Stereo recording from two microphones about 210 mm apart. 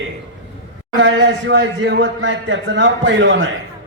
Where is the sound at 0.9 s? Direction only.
60° right (ahead or behind).